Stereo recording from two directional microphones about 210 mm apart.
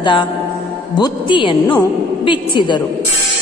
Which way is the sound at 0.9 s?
20° left (ahead or behind).